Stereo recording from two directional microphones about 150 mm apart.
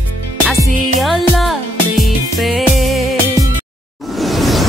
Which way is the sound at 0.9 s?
Centre (ahead or behind).